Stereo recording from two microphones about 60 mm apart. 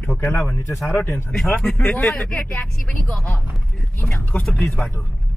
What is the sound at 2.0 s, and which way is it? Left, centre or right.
Speech, centre.